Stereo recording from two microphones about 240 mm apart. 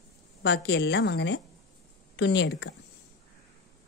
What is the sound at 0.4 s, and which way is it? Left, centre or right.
A woman's voice, left.